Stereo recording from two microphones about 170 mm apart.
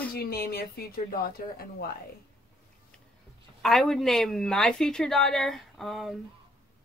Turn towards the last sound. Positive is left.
turn(degrees=0)  # may be behind; listen again after turning